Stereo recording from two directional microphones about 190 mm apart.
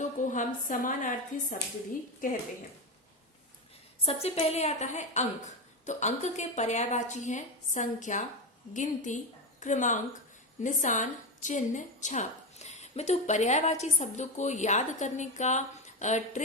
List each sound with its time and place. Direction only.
0.0 s a woman's voice: 40° left (ahead or behind)
4.0 s a woman's voice: 30° left (ahead or behind)